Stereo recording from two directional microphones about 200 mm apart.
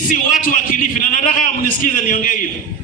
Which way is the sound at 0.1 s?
40° left (ahead or behind).